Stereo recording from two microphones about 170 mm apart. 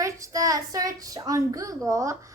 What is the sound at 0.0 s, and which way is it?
A woman's voice, 20° right (ahead or behind).